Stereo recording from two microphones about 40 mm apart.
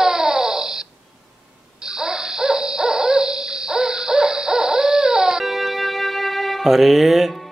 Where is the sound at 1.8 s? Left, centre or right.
Centre.